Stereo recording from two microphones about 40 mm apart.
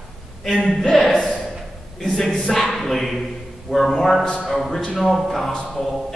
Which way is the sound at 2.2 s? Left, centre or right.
Centre.